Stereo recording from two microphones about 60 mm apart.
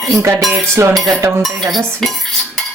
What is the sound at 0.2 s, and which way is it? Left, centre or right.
Music, right.